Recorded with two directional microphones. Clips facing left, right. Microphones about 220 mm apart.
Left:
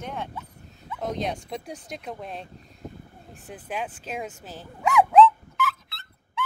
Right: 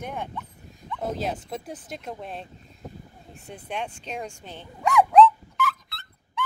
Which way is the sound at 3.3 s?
Centre (ahead or behind).